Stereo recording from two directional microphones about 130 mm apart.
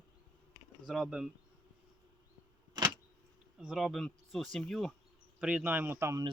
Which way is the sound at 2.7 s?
35° right (ahead or behind).